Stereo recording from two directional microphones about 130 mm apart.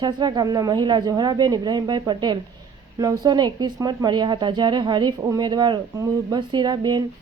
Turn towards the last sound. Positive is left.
turn(degrees=-35)  # may be behind; listen again after turning